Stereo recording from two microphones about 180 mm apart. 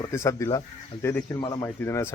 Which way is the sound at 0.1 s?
15° left (ahead or behind).